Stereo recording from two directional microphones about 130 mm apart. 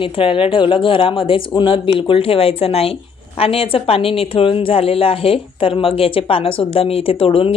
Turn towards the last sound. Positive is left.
turn(degrees=45)  # may be behind; listen again after turning